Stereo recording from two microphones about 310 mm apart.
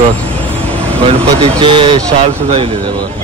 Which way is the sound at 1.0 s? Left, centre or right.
Centre.